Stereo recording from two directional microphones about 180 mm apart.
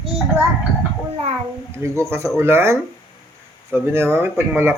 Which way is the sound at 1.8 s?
15° right (ahead or behind).